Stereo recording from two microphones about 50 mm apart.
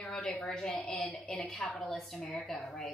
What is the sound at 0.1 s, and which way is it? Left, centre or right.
A woman's voice, centre.